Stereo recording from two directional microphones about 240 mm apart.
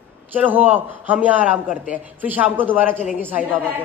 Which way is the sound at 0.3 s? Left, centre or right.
Centre.